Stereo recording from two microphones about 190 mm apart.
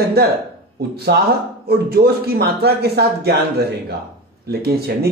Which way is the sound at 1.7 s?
55° right (ahead or behind).